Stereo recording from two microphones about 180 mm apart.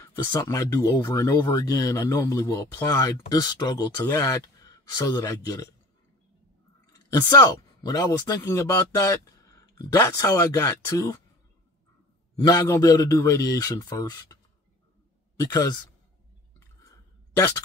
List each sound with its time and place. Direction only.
0.0 s speech: 20° left (ahead or behind)
6.9 s speech: 20° left (ahead or behind)
12.4 s speech: 15° left (ahead or behind)